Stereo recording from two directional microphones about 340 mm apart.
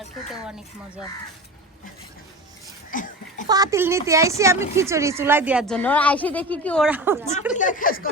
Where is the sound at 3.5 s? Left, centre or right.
Centre.